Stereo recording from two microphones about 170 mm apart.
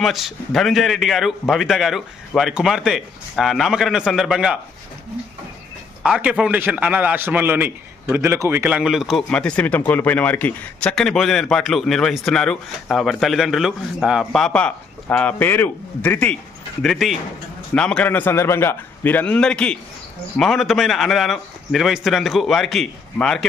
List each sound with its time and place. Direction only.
0.0 s a man's voice: centre (ahead or behind)
6.0 s a man's voice: 5° right (ahead or behind)